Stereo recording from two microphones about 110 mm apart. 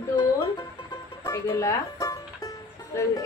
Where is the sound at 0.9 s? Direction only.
30° left (ahead or behind).